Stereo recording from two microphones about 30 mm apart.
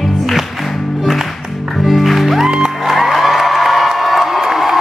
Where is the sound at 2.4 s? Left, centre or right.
Centre.